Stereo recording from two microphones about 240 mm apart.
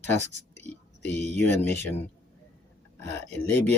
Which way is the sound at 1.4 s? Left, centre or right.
Centre.